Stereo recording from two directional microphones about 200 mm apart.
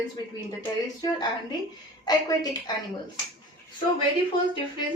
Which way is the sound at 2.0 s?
20° left (ahead or behind).